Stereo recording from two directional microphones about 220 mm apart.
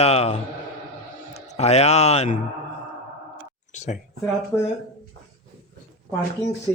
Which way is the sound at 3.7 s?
30° left (ahead or behind).